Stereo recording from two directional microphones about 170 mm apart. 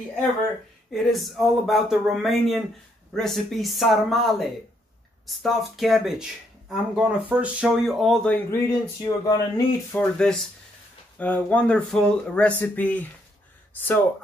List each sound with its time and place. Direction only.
0.9 s speech: centre (ahead or behind); by 9.3 s 20° left (ahead or behind)
9.9 s speech: 5° left (ahead or behind)